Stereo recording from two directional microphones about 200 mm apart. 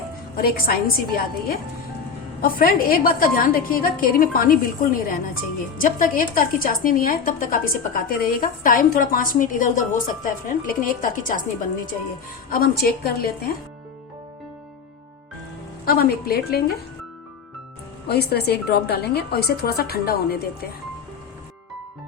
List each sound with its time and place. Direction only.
0.3 s a woman's voice: 45° left (ahead or behind)
12.5 s speech: 50° left (ahead or behind)
16.0 s speech: 50° left (ahead or behind)
18.1 s speech: 55° left (ahead or behind)